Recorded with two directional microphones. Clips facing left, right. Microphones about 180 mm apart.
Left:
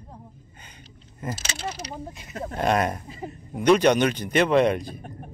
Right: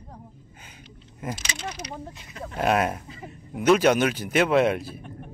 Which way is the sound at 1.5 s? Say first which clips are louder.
Left 2 dB; 30° left (ahead or behind).